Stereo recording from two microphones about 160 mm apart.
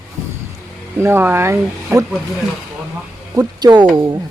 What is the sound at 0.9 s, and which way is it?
Speech, 15° right (ahead or behind).